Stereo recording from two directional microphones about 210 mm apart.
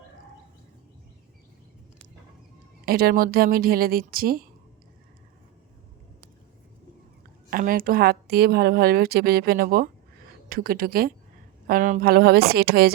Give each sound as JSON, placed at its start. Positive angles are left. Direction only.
{"t": 2.8, "sound": "a woman's voice", "side_deg": -45}
{"t": 7.5, "sound": "a woman's voice", "side_deg": -40}